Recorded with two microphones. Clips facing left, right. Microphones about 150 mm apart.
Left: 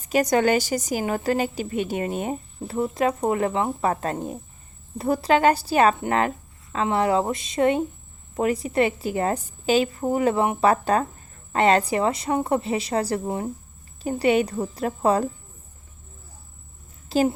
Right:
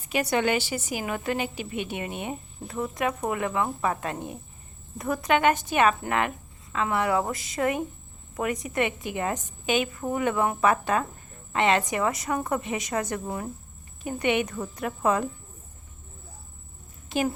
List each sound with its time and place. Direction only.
0.0 s a woman's voice: 40° left (ahead or behind); by 10.6 s 25° left (ahead or behind)
10.6 s a woman's voice: 40° left (ahead or behind)
17.1 s a woman's voice: 35° left (ahead or behind)